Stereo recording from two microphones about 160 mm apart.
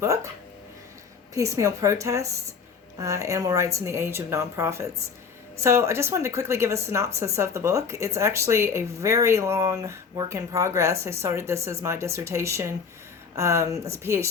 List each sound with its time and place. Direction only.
0.0 s speech: 15° right (ahead or behind)
1.3 s a woman's voice: 20° right (ahead or behind)